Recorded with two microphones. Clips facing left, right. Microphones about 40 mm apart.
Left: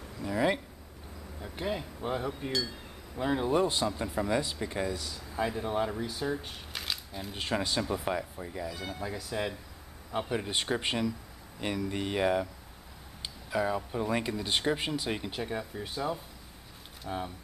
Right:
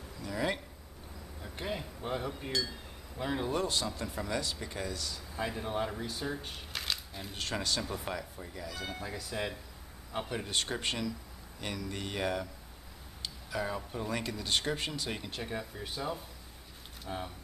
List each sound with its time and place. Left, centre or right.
0.2 s a sound: centre
1.4 s a sound: centre
2.0 s speech: centre
3.6 s speech: centre
5.1 s speech: centre
7.3 s speech: centre
9.0 s speech: centre